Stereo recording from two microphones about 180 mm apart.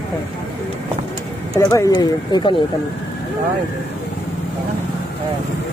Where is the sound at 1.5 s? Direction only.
20° left (ahead or behind).